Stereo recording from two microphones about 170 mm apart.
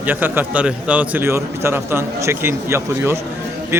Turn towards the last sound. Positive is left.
turn(degrees=-15)  # may be behind; listen again after turning